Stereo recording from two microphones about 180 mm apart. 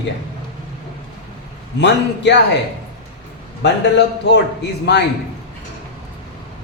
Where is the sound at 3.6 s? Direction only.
70° left (ahead or behind).